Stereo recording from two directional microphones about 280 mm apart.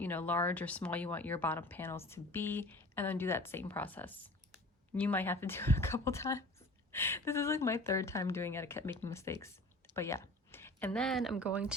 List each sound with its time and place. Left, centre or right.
0.0 s speech: centre